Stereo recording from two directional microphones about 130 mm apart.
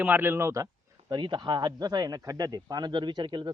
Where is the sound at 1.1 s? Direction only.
35° right (ahead or behind).